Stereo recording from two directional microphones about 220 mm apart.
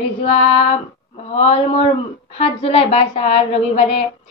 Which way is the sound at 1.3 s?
30° left (ahead or behind).